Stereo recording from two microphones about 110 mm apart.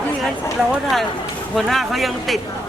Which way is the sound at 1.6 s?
Centre (ahead or behind).